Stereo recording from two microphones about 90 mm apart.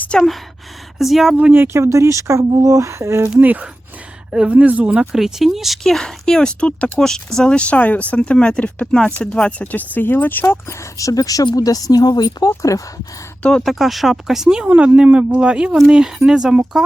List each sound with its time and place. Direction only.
0.1 s speech: 10° left (ahead or behind)
0.9 s speech: centre (ahead or behind)
1.4 s speech: 20° right (ahead or behind)
3.3 s speech: 20° right (ahead or behind)
5.1 s speech: 5° right (ahead or behind); by 10.8 s 25° left (ahead or behind)
10.9 s speech: 40° left (ahead or behind)
12.5 s speech: 35° left (ahead or behind)
13.4 s speech: 5° left (ahead or behind)